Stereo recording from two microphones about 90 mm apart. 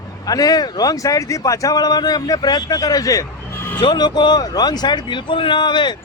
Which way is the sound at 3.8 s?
55° left (ahead or behind).